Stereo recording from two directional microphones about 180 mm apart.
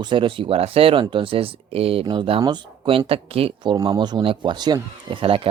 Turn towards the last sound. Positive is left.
turn(degrees=-30)  # may be behind; listen again after turning